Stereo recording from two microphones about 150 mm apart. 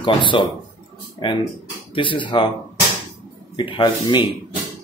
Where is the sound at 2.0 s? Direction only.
35° left (ahead or behind).